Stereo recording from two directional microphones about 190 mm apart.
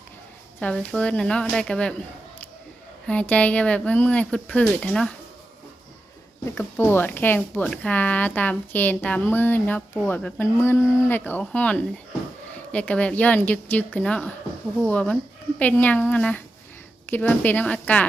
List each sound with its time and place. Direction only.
0.6 s speech: 5° left (ahead or behind)
3.1 s speech: 5° left (ahead or behind)
6.4 s speech: 10° left (ahead or behind)